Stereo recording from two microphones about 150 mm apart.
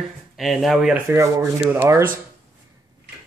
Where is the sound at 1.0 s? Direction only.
20° right (ahead or behind).